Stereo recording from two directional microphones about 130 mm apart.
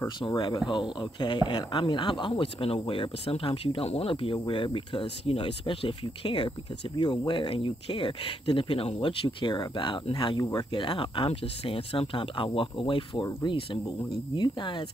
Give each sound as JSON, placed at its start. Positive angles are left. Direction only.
{"t": 0.3, "sound": "speech", "side_deg": 30}